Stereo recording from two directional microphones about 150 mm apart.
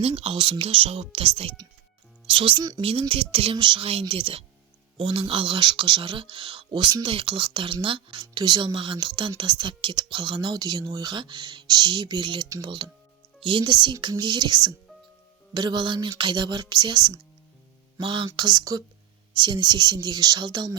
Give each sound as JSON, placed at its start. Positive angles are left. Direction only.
{"t": 0.0, "sound": "speech", "side_deg": -40}